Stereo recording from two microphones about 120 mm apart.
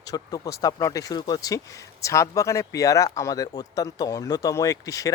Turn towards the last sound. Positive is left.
turn(degrees=30)  # may be behind; listen again after turning